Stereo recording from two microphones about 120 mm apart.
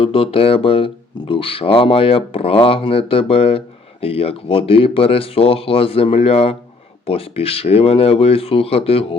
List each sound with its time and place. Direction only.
0.0 s speech: 50° left (ahead or behind)